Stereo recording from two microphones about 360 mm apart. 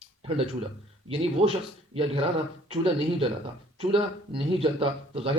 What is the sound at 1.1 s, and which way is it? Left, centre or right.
Speech, centre.